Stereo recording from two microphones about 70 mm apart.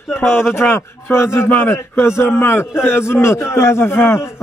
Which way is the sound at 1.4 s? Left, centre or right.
Left.